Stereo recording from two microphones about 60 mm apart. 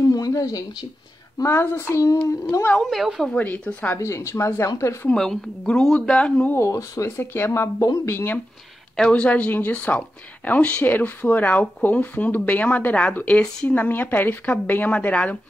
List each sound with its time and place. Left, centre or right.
0.0 s a sound: left
1.4 s speech: left
2.2 s speech: left
2.8 s a woman's voice: centre
3.3 s speech: left
4.0 s speech: left
5.1 s speech: centre
6.6 s speech: left
7.1 s speech: left
7.8 s speech: left
8.1 s speech: left
9.1 s speech: left